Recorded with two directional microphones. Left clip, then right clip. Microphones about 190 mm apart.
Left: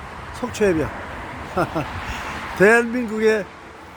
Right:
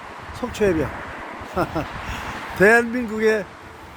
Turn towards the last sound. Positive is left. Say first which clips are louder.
# left 1 dB
turn(degrees=-5)  # may be behind; listen again after turning